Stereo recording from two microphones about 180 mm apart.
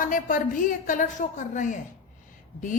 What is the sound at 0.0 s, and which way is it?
A woman's voice, 50° left (ahead or behind).